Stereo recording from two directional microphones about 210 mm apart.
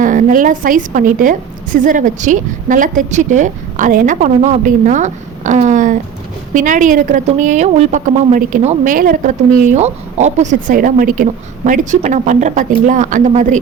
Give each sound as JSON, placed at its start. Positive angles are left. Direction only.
{"t": 0.0, "sound": "a woman's voice", "side_deg": -40}